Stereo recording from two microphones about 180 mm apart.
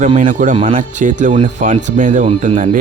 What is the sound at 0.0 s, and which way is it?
Speech, 40° right (ahead or behind).